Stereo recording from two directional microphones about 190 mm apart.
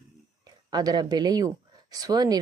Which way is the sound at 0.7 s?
20° right (ahead or behind).